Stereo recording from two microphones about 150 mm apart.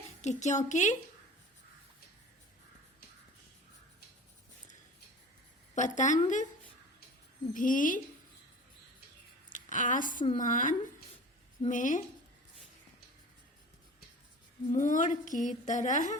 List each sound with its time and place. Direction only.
0.2 s a woman's voice: 50° left (ahead or behind)
5.7 s speech: 55° left (ahead or behind)
7.5 s speech: 60° left (ahead or behind)
9.5 s a woman's voice: 60° left (ahead or behind)
14.7 s speech: 60° left (ahead or behind)